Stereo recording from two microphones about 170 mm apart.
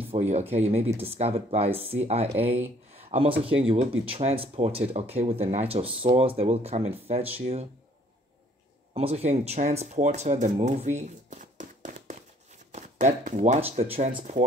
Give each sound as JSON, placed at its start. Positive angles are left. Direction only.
{"t": 0.1, "sound": "speech", "side_deg": -40}
{"t": 8.9, "sound": "speech", "side_deg": -40}